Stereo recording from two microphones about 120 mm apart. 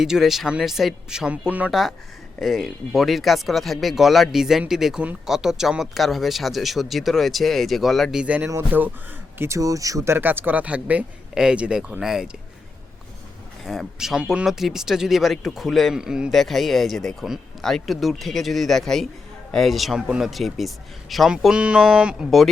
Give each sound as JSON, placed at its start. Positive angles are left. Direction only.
{"t": 0.0, "sound": "speech", "side_deg": -5}
{"t": 8.2, "sound": "speech", "side_deg": -10}
{"t": 13.7, "sound": "speech", "side_deg": 0}